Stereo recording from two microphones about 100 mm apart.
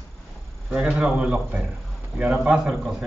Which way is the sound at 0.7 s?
10° right (ahead or behind).